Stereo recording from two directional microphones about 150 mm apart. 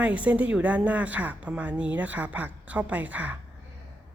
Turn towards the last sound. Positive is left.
turn(degrees=-10)  # may be behind; listen again after turning